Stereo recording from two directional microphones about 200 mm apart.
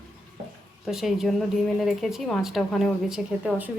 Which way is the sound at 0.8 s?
Centre (ahead or behind).